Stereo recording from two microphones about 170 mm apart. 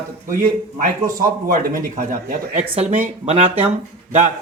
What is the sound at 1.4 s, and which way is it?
A man's voice, 55° right (ahead or behind).